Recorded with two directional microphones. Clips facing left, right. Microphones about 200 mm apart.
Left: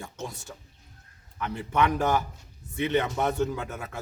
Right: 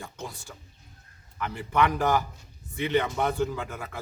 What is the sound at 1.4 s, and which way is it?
Speech, 25° left (ahead or behind).